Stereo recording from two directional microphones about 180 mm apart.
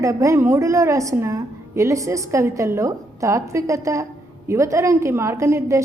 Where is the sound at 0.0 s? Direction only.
15° right (ahead or behind).